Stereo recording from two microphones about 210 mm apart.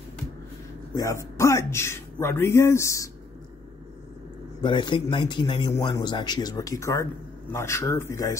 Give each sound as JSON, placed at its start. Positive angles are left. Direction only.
{"t": 0.9, "sound": "speech", "side_deg": 15}
{"t": 4.6, "sound": "a man's voice", "side_deg": 20}